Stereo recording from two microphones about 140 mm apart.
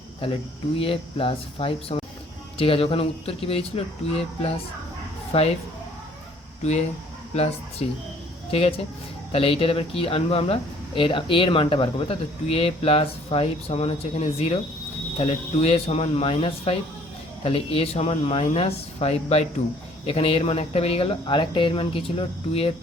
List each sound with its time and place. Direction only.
0.2 s speech: 40° left (ahead or behind)
5.3 s speech: 45° left (ahead or behind)
6.6 s speech: 55° left (ahead or behind)